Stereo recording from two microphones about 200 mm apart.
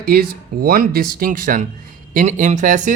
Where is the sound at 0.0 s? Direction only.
50° right (ahead or behind).